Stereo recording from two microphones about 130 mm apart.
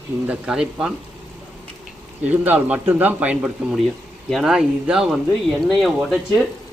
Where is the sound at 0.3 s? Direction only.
5° right (ahead or behind).